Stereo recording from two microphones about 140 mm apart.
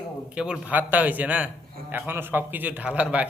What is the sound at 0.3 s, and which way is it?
A man's voice, 5° right (ahead or behind).